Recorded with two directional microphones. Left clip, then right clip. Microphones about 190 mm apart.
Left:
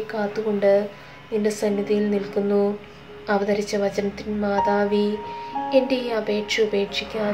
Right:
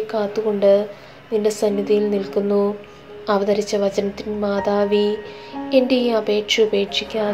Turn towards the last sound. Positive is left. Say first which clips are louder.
# right 4 dB
turn(degrees=-15)  # may be behind; listen again after turning